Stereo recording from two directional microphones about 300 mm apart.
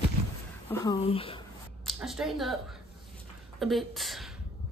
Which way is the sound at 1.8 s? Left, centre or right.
Centre.